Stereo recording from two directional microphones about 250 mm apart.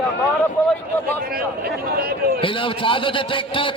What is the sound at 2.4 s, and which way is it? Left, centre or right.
A man's voice, left.